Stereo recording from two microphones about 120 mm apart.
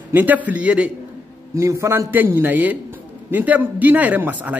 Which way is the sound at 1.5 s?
25° right (ahead or behind).